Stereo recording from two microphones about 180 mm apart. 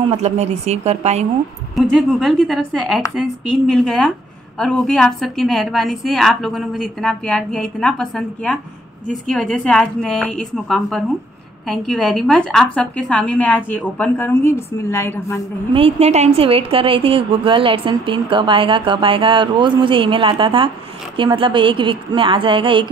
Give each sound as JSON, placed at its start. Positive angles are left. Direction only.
{"t": 0.1, "sound": "speech", "side_deg": -35}
{"t": 1.8, "sound": "a woman's voice", "side_deg": 0}
{"t": 15.7, "sound": "a woman's voice", "side_deg": -35}